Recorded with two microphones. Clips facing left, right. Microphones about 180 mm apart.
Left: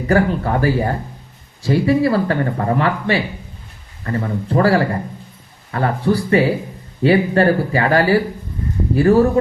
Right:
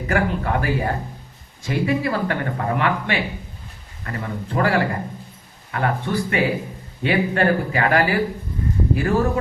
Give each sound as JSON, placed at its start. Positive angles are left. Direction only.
{"t": 0.1, "sound": "speech", "side_deg": 35}